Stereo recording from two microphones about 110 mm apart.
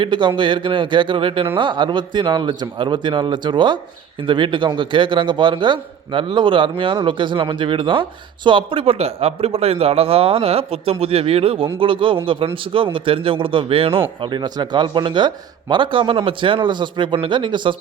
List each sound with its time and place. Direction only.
0.0 s a man's voice: 45° right (ahead or behind)